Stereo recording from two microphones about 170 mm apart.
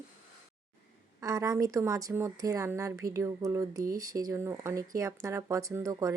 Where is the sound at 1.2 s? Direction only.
20° right (ahead or behind).